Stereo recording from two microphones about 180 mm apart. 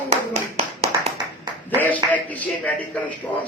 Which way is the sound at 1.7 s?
10° left (ahead or behind).